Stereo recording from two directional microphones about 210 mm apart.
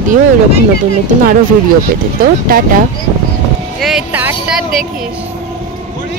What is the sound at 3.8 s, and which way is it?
Speech, 5° right (ahead or behind).